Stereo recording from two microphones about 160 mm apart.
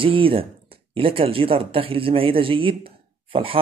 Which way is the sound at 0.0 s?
35° right (ahead or behind).